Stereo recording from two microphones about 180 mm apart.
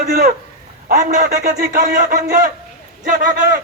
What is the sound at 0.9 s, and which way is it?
A man's voice, 45° right (ahead or behind).